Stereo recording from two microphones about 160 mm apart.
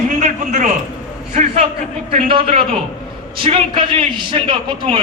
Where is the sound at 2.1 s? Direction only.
35° right (ahead or behind).